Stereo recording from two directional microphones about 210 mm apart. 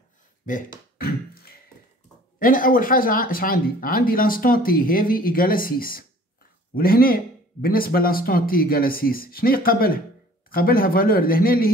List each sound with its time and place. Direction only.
0.9 s beatboxing: 45° left (ahead or behind)
2.3 s speech: 40° left (ahead or behind)